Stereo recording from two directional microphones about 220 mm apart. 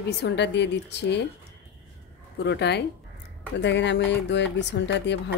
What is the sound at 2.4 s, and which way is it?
Speech, 50° left (ahead or behind).